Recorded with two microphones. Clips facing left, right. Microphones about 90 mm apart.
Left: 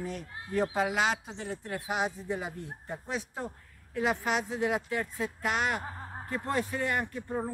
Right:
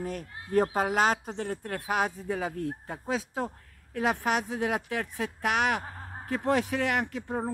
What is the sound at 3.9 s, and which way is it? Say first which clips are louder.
Speech: right 2 dB; 55° right (ahead or behind).